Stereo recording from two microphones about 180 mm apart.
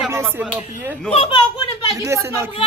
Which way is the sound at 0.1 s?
10° right (ahead or behind).